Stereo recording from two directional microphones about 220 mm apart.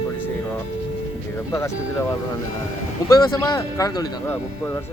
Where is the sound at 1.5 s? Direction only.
15° left (ahead or behind).